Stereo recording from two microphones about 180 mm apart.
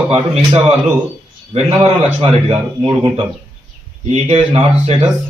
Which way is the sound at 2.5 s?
30° right (ahead or behind).